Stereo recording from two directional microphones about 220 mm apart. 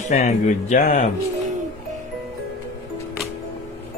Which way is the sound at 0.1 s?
30° left (ahead or behind).